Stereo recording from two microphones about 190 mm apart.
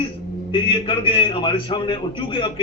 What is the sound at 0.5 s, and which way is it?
A man's voice, 25° left (ahead or behind).